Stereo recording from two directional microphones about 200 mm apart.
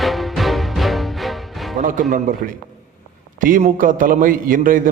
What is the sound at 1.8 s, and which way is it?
Music, 40° right (ahead or behind).